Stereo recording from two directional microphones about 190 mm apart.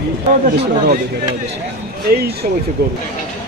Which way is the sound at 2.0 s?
55° right (ahead or behind).